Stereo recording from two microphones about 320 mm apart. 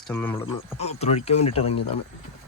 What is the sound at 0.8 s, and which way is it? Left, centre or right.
Speech, centre.